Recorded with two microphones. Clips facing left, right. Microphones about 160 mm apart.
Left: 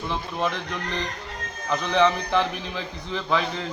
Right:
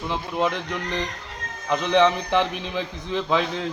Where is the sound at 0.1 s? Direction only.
15° right (ahead or behind).